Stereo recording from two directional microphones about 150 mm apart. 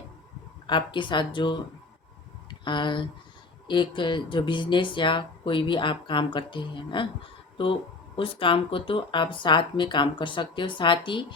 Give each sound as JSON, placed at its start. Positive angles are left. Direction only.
{"t": 0.7, "sound": "speech", "side_deg": 30}